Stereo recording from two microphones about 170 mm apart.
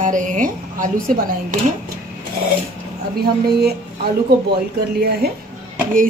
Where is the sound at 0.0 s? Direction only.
50° right (ahead or behind).